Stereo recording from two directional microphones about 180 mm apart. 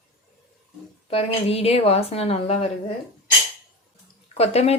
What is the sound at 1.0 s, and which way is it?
A woman's voice, 35° left (ahead or behind).